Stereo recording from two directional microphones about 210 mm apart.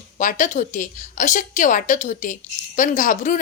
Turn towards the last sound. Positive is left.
turn(degrees=40)  # may be behind; listen again after turning